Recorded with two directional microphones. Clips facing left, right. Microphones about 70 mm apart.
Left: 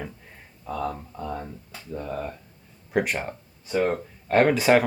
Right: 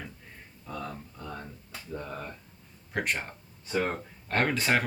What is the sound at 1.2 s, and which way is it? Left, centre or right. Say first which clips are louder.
Speech: left 9 dB; left.